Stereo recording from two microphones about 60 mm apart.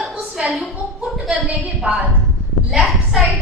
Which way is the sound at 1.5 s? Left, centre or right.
Centre.